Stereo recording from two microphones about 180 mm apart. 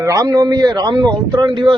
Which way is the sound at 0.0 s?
20° right (ahead or behind).